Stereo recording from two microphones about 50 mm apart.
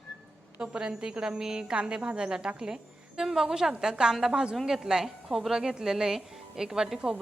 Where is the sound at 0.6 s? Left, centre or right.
Centre.